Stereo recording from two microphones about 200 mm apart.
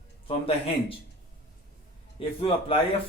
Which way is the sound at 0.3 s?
25° left (ahead or behind).